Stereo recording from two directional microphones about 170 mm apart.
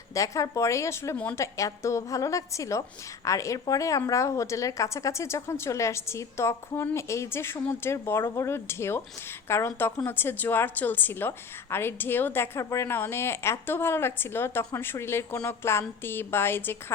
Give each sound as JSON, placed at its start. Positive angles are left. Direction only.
{"t": 0.1, "sound": "a woman's voice", "side_deg": 20}